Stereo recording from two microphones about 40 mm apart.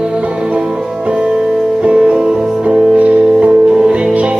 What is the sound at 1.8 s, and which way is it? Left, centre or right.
Music, right.